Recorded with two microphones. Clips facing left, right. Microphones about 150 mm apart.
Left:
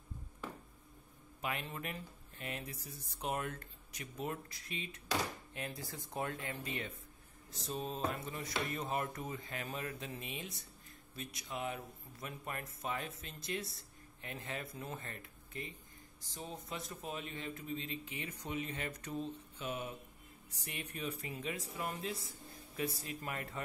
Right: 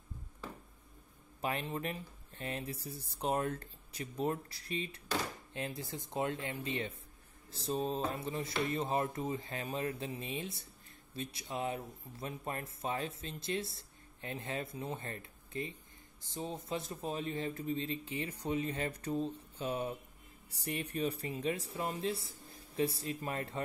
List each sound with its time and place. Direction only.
1.4 s speech: 35° right (ahead or behind)